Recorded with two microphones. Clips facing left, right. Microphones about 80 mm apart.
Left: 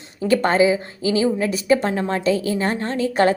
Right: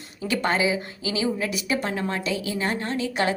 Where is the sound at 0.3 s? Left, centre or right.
Left.